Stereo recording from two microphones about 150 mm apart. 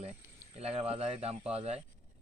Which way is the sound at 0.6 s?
45° right (ahead or behind).